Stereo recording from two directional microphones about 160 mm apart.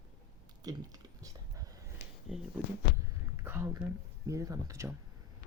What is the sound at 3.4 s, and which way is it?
Speech, 15° right (ahead or behind).